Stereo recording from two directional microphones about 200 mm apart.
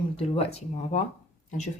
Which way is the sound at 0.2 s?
30° left (ahead or behind).